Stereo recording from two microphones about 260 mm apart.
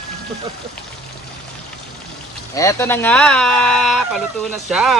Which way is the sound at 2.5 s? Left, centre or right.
Centre.